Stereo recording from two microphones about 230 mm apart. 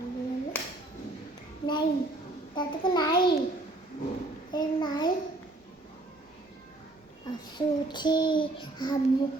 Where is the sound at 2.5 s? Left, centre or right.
Centre.